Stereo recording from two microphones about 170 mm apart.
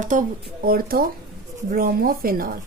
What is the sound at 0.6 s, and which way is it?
A woman's voice, 60° right (ahead or behind).